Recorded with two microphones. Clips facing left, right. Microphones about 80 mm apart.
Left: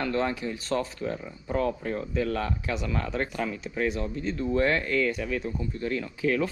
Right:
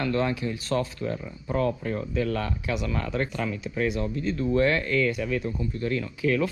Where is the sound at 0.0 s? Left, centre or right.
Left.